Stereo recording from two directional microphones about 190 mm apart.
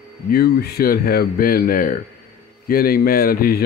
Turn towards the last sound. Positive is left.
turn(degrees=50)  # may be behind; listen again after turning